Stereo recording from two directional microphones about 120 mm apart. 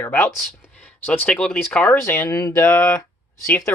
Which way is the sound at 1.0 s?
10° left (ahead or behind).